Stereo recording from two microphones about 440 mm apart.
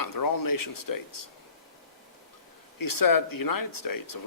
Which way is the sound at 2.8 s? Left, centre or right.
Left.